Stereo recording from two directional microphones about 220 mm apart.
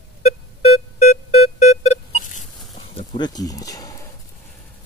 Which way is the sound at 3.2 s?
15° left (ahead or behind).